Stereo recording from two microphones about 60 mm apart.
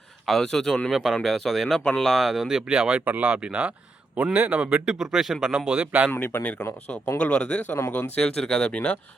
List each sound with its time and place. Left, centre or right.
0.3 s speech: centre
0.9 s speech: centre
1.8 s speech: centre
2.0 s speech: centre
3.0 s speech: right; by 5.5 s centre
5.5 s speech: centre
6.1 s speech: left
7.2 s speech: left
7.7 s speech: left
8.1 s speech: centre